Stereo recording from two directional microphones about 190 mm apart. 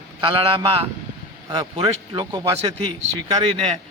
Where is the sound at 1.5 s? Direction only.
25° right (ahead or behind).